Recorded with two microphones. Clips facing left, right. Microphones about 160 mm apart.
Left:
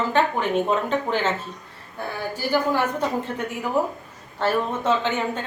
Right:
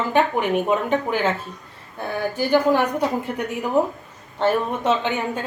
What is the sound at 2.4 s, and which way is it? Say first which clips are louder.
Speech: right 4 dB; 20° right (ahead or behind).